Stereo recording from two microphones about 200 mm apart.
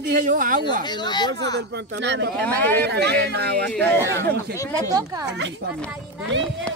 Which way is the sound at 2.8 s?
55° right (ahead or behind).